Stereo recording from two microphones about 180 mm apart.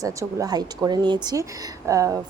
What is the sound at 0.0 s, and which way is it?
Speech, 15° right (ahead or behind).